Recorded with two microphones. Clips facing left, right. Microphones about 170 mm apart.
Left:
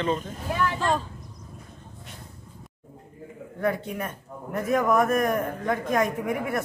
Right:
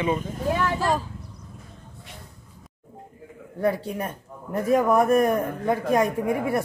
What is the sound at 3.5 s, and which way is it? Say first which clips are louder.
A man's voice: right 3 dB; 35° right (ahead or behind).